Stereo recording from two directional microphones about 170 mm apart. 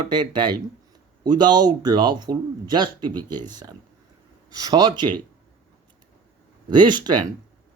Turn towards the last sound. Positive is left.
turn(degrees=-25)  # may be behind; listen again after turning